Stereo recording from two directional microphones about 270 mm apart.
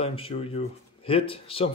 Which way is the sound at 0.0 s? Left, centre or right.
Centre.